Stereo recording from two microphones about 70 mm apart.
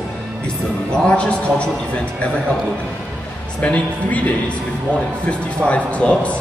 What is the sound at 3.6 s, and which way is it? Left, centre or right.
Speech, centre.